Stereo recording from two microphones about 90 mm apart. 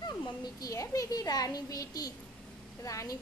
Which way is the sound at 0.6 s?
40° left (ahead or behind).